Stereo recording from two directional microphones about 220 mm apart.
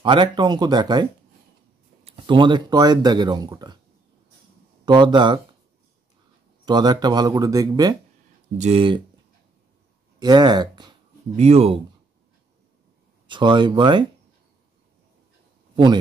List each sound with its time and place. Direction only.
0.0 s speech: 20° right (ahead or behind)
2.0 s speech: 20° right (ahead or behind)
4.8 s speech: 20° right (ahead or behind)
6.6 s speech: 20° right (ahead or behind)
8.5 s speech: 30° right (ahead or behind)
10.1 s speech: 20° right (ahead or behind)
13.3 s speech: 20° right (ahead or behind)
15.7 s a man's voice: 20° right (ahead or behind)